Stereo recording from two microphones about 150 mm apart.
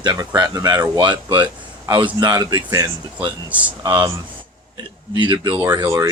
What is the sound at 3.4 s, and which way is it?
Speech, 10° right (ahead or behind).